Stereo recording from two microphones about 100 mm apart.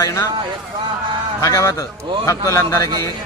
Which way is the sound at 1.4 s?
35° left (ahead or behind).